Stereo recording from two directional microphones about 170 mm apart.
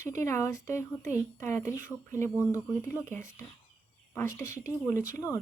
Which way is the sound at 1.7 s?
50° right (ahead or behind).